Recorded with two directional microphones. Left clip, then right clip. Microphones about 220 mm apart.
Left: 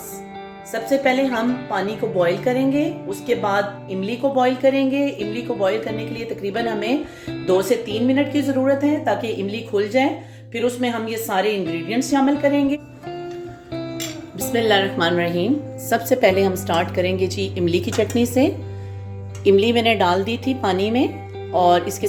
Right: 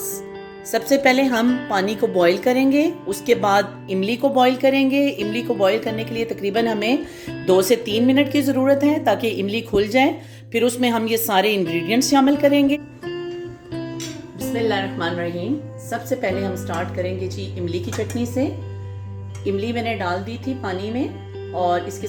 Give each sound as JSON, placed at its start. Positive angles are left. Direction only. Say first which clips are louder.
{"t": 0.7, "sound": "speech", "louder": "right 2 dB", "side_deg": -40}
{"t": 14.3, "sound": "a woman's voice", "louder": "left 4 dB", "side_deg": 35}
{"t": 19.5, "sound": "a woman's voice", "louder": "left 8 dB", "side_deg": 30}